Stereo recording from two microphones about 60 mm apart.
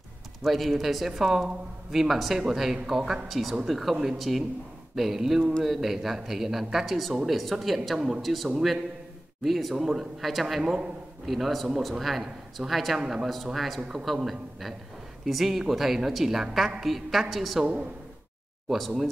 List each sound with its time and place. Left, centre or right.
0.4 s speech: centre
10.6 s a man's voice: centre
11.2 s a man's voice: centre
13.3 s speech: centre
13.7 s a man's voice: centre
18.7 s speech: centre